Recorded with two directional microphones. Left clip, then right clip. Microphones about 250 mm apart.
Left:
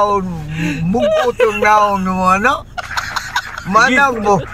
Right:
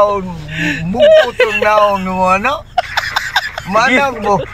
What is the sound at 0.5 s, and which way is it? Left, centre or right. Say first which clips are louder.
Speech: right 3 dB; centre.